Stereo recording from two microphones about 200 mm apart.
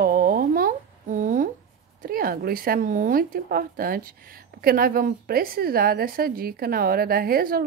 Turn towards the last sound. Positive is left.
turn(degrees=-45)  # may be behind; listen again after turning